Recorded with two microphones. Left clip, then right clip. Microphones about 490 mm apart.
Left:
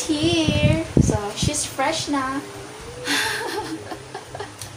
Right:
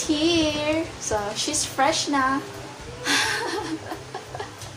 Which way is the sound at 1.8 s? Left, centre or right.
Right.